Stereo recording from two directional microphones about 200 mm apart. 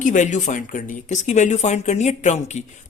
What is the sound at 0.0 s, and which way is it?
Speech, 40° left (ahead or behind).